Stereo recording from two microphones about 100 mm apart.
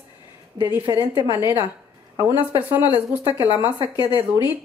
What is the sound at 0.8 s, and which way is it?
Speech, 45° right (ahead or behind).